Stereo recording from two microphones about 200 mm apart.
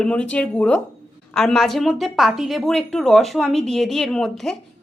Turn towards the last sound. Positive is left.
turn(degrees=0)  # may be behind; listen again after turning